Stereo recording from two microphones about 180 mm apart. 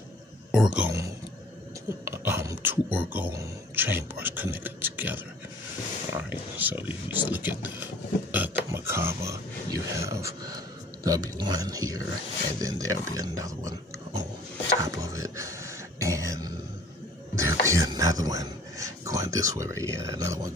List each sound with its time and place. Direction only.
0.5 s speech: 5° right (ahead or behind)
2.0 s speech: 15° right (ahead or behind)
14.8 s a sound: 15° right (ahead or behind)